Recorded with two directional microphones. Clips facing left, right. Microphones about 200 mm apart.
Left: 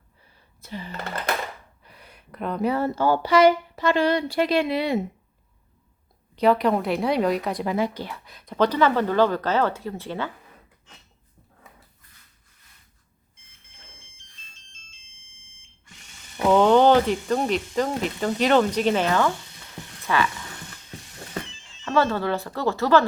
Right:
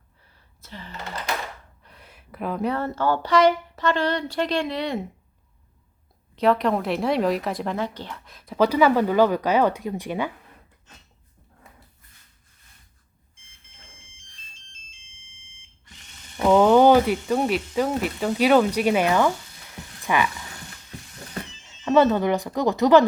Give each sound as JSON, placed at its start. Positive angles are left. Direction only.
{"t": 0.6, "sound": "a sound", "side_deg": 10}
{"t": 1.8, "sound": "speech", "side_deg": 0}
{"t": 6.3, "sound": "a woman's voice", "side_deg": 0}
{"t": 15.3, "sound": "alarm", "side_deg": 50}
{"t": 16.4, "sound": "speech", "side_deg": -5}
{"t": 21.8, "sound": "speech", "side_deg": -20}